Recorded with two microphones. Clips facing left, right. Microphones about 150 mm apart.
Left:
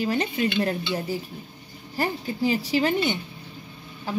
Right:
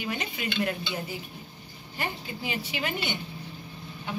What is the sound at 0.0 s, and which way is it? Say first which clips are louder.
Speech: left 9 dB; 35° left (ahead or behind).